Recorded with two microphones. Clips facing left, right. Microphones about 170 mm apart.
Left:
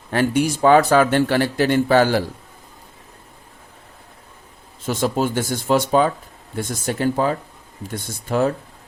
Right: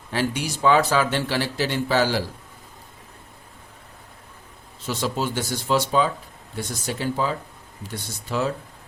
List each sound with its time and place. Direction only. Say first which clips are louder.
0.1 s speech: left 7 dB; 55° left (ahead or behind)
4.9 s speech: left 5 dB; 50° left (ahead or behind)